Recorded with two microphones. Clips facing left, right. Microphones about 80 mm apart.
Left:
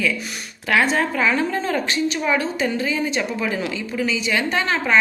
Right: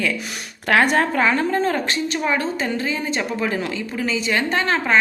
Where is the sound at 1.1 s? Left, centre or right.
Right.